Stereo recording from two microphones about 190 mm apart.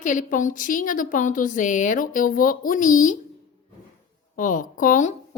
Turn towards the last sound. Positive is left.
turn(degrees=45)  # may be behind; listen again after turning